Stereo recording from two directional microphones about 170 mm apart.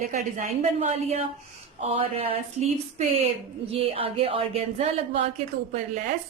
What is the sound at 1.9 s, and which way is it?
A woman's voice, 35° right (ahead or behind).